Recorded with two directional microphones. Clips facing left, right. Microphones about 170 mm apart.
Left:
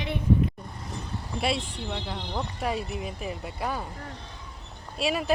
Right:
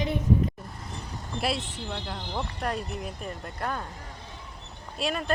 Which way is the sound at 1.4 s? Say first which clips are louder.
Left 1 dB; centre (ahead or behind).